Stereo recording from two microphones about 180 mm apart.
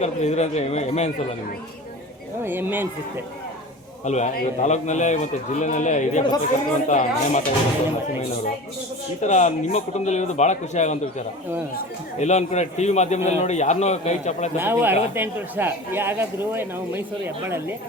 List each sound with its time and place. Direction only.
0.0 s a man's voice: 40° left (ahead or behind)
2.4 s speech: 10° right (ahead or behind)
4.0 s a man's voice: 40° left (ahead or behind)
9.2 s a man's voice: 40° left (ahead or behind)
12.2 s a man's voice: 40° left (ahead or behind)
14.6 s speech: 10° right (ahead or behind)